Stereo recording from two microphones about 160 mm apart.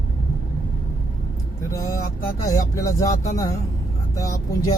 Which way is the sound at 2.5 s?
20° left (ahead or behind).